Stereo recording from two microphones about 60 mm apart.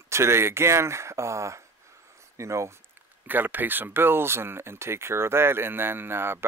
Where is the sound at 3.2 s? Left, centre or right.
Right.